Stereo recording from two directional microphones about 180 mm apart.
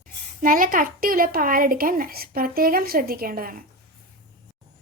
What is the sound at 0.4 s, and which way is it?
A woman's voice, 50° right (ahead or behind).